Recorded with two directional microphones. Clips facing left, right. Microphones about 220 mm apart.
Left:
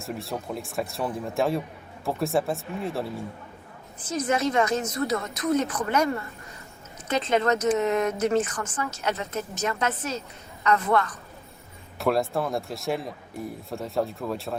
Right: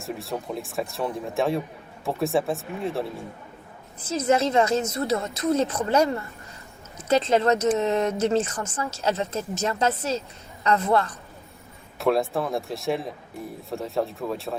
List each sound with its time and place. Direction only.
0.0 s a man's voice: centre (ahead or behind)
4.1 s a woman's voice: 25° right (ahead or behind)
7.1 s a woman's voice: 30° right (ahead or behind)
11.9 s a man's voice: centre (ahead or behind)